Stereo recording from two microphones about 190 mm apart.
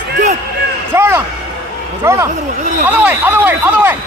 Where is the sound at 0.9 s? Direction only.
10° right (ahead or behind).